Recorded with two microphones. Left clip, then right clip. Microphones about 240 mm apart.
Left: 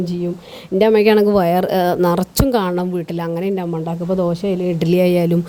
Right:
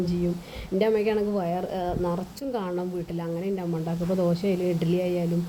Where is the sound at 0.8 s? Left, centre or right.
Left.